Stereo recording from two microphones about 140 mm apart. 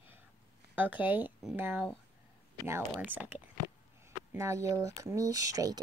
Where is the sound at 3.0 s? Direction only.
15° right (ahead or behind).